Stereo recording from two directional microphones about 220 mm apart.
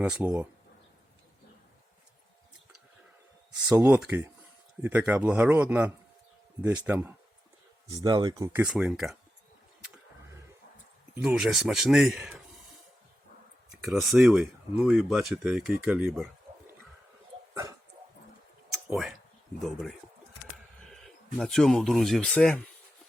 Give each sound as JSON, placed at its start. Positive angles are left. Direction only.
{"t": 0.0, "sound": "a man's voice", "side_deg": -5}
{"t": 3.7, "sound": "a man's voice", "side_deg": -5}
{"t": 8.6, "sound": "speech", "side_deg": 0}
{"t": 11.1, "sound": "speech", "side_deg": -5}
{"t": 13.7, "sound": "speech", "side_deg": 0}
{"t": 17.5, "sound": "dog", "side_deg": -15}
{"t": 18.9, "sound": "speech", "side_deg": 0}